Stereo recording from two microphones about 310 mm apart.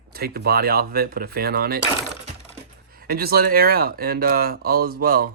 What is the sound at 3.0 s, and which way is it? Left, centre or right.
Speech, right.